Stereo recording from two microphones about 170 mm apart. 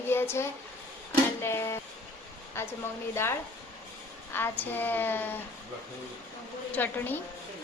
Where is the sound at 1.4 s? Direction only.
15° left (ahead or behind).